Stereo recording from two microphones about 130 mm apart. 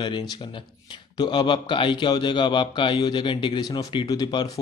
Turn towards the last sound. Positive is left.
turn(degrees=30)  # may be behind; listen again after turning